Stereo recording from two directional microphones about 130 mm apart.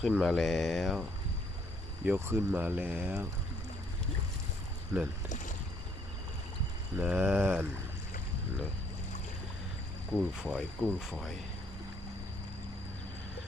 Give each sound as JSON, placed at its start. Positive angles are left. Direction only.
{"t": 0.0, "sound": "speech", "side_deg": 0}
{"t": 2.0, "sound": "speech", "side_deg": -20}
{"t": 7.0, "sound": "speech", "side_deg": -5}
{"t": 10.1, "sound": "speech", "side_deg": -5}